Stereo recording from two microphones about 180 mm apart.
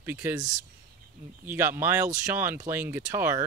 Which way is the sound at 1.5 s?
15° right (ahead or behind).